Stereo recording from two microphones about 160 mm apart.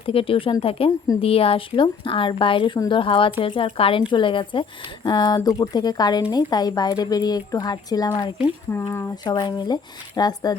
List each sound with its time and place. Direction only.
0.0 s speech: 35° left (ahead or behind)